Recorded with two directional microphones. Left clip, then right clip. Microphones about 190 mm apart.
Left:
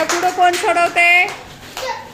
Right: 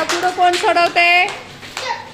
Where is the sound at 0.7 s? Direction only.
15° right (ahead or behind).